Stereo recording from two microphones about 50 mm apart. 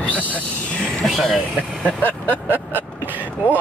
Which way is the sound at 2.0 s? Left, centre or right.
Right.